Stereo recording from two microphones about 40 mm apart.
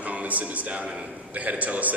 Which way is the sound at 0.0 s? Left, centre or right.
Right.